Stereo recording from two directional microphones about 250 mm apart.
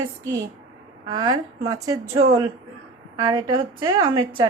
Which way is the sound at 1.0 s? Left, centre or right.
Centre.